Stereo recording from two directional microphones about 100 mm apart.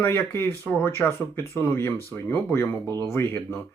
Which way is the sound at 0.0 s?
25° left (ahead or behind).